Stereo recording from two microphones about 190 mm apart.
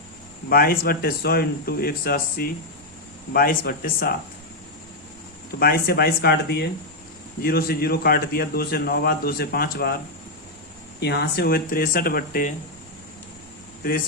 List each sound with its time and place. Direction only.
0.5 s a man's voice: 50° left (ahead or behind)
5.5 s a man's voice: 55° left (ahead or behind)
11.0 s a man's voice: 60° left (ahead or behind)